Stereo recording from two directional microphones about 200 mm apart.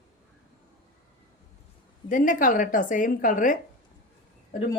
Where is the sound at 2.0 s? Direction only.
40° left (ahead or behind).